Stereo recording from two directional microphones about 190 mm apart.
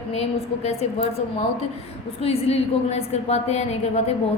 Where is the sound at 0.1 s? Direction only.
35° left (ahead or behind).